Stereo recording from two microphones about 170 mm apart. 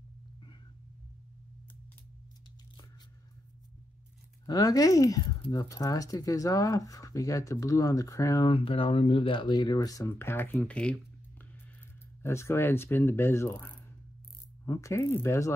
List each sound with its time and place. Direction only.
4.5 s speech: 20° left (ahead or behind)
8.5 s speech: 35° left (ahead or behind); by 11.0 s 5° left (ahead or behind)
12.2 s speech: 15° left (ahead or behind)